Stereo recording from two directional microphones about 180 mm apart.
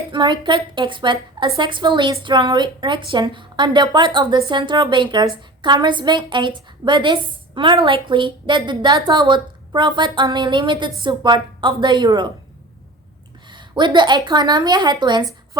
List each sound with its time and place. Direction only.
0.1 s a woman's voice: 25° right (ahead or behind)
13.5 s a sound: 25° right (ahead or behind)
14.3 s a woman's voice: 25° right (ahead or behind)